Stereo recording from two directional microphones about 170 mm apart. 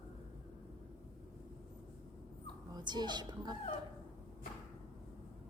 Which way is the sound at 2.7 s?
25° right (ahead or behind).